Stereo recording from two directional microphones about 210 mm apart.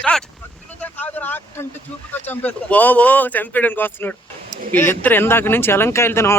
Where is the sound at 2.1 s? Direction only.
10° left (ahead or behind).